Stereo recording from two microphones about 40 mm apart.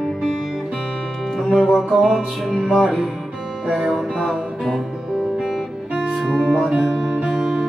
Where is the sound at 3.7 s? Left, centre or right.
Centre.